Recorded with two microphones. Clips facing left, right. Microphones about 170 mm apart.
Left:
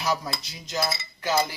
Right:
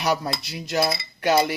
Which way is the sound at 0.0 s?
65° right (ahead or behind).